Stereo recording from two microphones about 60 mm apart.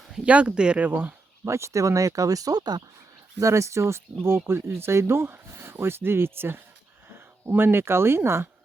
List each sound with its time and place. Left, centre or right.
0.3 s speech: centre
0.9 s speech: right
1.5 s speech: right
3.4 s speech: right